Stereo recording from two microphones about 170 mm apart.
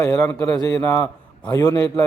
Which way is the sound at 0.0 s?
15° left (ahead or behind).